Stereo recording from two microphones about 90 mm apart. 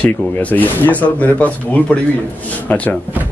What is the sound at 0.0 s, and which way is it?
Speech, 15° left (ahead or behind).